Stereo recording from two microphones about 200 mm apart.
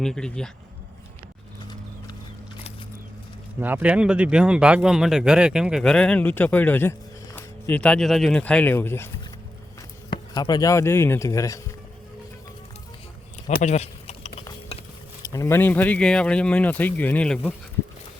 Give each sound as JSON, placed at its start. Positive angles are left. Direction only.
{"t": 0.0, "sound": "speech", "side_deg": 5}
{"t": 3.6, "sound": "speech", "side_deg": -10}
{"t": 10.1, "sound": "speech", "side_deg": 20}
{"t": 13.6, "sound": "keys jangling", "side_deg": 35}
{"t": 15.2, "sound": "speech", "side_deg": 15}